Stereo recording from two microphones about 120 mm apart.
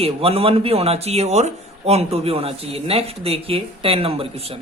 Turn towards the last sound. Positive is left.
turn(degrees=-50)  # may be behind; listen again after turning